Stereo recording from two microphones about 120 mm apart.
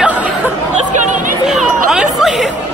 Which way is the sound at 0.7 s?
90° right.